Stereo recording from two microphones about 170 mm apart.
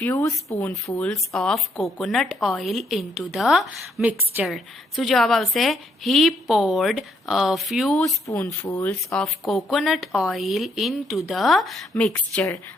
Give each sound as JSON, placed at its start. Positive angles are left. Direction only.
{"t": 0.0, "sound": "speech", "side_deg": 15}
{"t": 1.0, "sound": "a woman's voice", "side_deg": 0}
{"t": 8.3, "sound": "speech", "side_deg": 20}
{"t": 9.2, "sound": "a woman's voice", "side_deg": 0}